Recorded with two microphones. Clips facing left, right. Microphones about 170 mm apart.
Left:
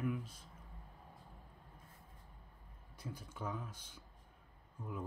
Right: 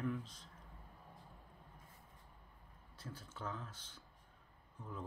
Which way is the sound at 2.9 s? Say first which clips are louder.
Left 3 dB; 10° left (ahead or behind).